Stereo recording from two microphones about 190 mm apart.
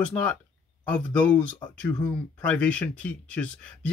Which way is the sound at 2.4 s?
5° left (ahead or behind).